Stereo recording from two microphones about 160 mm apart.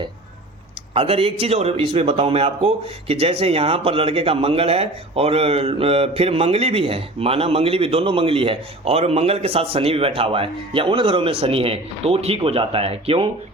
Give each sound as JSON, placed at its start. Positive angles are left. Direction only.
{"t": 0.9, "sound": "a man's voice", "side_deg": -35}